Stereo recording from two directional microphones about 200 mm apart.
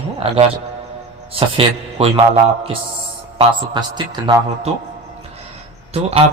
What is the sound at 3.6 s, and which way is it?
A man's voice, 20° right (ahead or behind).